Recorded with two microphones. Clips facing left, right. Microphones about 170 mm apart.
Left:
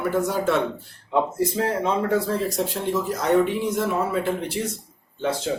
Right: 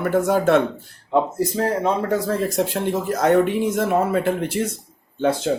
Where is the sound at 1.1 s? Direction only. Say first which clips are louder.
Right 2 dB; 40° right (ahead or behind).